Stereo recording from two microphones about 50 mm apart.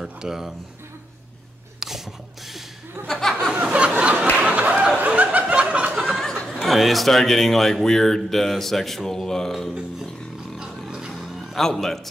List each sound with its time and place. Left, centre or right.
0.0 s speech: centre
1.8 s a sound: centre
3.1 s speech: centre
3.6 s a sound: right
4.9 s chuckle: right
5.9 s a sound: centre
6.2 s a man's voice: centre
10.9 s music: centre
11.1 s music: centre